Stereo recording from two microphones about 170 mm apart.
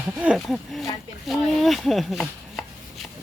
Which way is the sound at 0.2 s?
5° right (ahead or behind).